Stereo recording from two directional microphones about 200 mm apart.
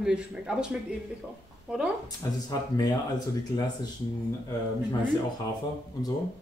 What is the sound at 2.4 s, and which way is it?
Speech, 20° left (ahead or behind).